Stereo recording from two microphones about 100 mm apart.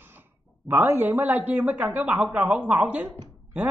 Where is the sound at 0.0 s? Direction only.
20° right (ahead or behind).